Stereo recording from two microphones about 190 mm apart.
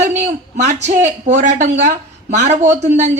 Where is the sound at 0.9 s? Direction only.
40° right (ahead or behind).